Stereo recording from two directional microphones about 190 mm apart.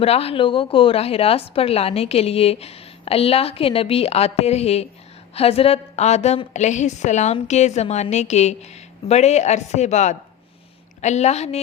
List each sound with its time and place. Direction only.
0.0 s a woman's voice: 30° left (ahead or behind)